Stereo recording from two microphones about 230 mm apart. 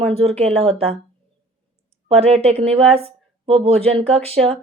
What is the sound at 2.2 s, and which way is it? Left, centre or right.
A woman's voice, right.